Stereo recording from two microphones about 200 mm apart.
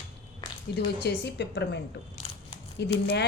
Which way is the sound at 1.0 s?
55° left (ahead or behind).